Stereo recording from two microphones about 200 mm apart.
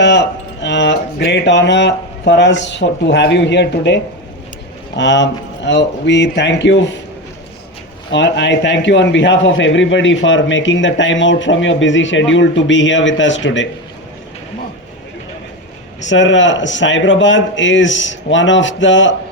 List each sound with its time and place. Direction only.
0.0 s speech: 60° left (ahead or behind)
8.1 s a man's voice: 60° left (ahead or behind)
16.0 s a man's voice: 65° left (ahead or behind)